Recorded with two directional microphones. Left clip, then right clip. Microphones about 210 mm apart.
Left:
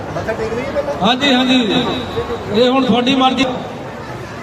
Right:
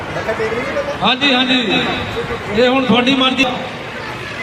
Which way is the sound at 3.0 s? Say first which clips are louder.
Even; 60° left (ahead or behind).